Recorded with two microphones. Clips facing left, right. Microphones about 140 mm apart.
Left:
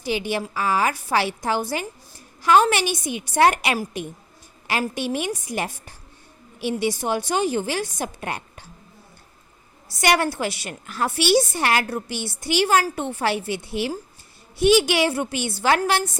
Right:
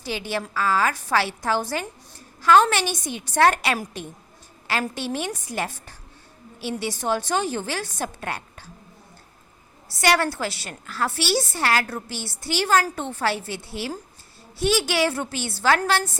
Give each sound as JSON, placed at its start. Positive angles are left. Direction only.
{"t": 0.0, "sound": "a woman's voice", "side_deg": 15}
{"t": 9.9, "sound": "a woman's voice", "side_deg": 15}